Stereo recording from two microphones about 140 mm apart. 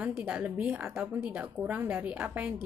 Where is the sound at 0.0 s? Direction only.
10° right (ahead or behind).